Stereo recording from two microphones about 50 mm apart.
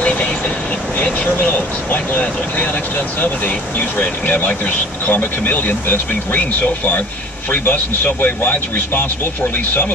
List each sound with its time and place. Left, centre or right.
0.0 s vehicle: left
0.9 s speech: left